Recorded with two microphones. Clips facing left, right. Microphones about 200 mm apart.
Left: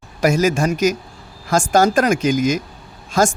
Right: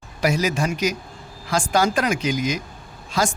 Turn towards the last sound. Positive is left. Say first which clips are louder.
# left 6 dB
turn(degrees=45)  # may be behind; listen again after turning